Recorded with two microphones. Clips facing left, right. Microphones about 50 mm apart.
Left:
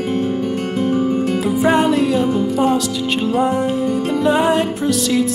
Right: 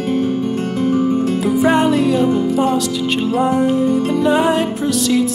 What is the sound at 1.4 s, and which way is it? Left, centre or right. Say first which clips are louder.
Music: right 1 dB; centre.